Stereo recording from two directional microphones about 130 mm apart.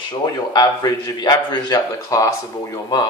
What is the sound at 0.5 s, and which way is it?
A man's voice, 30° left (ahead or behind).